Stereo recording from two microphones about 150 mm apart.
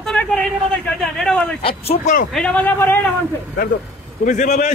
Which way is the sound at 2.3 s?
5° left (ahead or behind).